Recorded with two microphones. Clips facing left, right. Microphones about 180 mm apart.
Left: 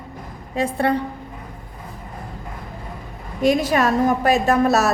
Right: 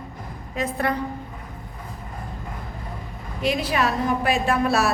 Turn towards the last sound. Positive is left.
turn(degrees=40)  # may be behind; listen again after turning